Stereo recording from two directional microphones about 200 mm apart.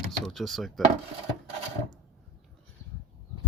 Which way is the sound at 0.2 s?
Centre (ahead or behind).